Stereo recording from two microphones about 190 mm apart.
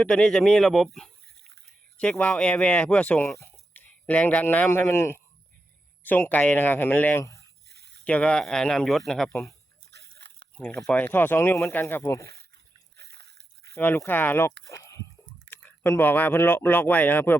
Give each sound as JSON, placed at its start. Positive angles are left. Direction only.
{"t": 0.0, "sound": "speech", "side_deg": 5}
{"t": 7.7, "sound": "a sound", "side_deg": -60}
{"t": 8.0, "sound": "speech", "side_deg": 5}
{"t": 9.9, "sound": "biting", "side_deg": -60}
{"t": 10.6, "sound": "speech", "side_deg": 5}
{"t": 13.0, "sound": "a sound", "side_deg": -60}
{"t": 13.7, "sound": "speech", "side_deg": 10}
{"t": 14.7, "sound": "a sound", "side_deg": 15}
{"t": 15.4, "sound": "speech", "side_deg": 10}